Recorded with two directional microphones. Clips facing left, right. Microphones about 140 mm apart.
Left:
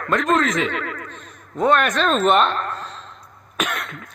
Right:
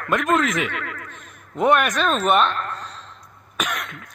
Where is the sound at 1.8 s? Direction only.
5° right (ahead or behind).